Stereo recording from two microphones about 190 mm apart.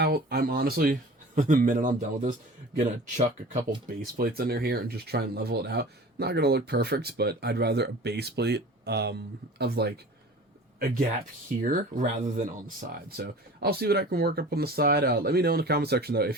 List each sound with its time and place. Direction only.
0.0 s speech: 55° right (ahead or behind); by 3.6 s 40° right (ahead or behind)
3.8 s speech: 50° right (ahead or behind)
11.6 s speech: 45° right (ahead or behind)